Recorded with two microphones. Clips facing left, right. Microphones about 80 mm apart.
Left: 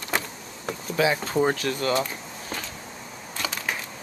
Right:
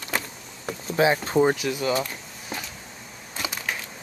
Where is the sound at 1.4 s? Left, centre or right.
Centre.